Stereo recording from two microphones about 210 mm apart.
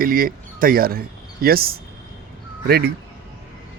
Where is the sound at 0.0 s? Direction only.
45° right (ahead or behind).